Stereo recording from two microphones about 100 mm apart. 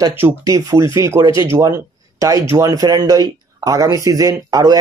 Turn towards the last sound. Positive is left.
turn(degrees=-40)  # may be behind; listen again after turning